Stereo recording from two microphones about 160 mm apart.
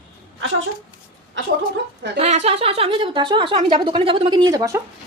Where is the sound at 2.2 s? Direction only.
45° right (ahead or behind).